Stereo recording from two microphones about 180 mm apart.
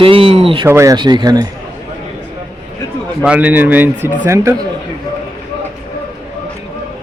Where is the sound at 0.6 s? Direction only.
15° right (ahead or behind).